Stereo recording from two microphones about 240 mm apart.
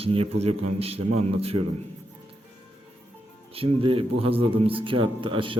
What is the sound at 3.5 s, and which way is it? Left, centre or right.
A man's voice, right.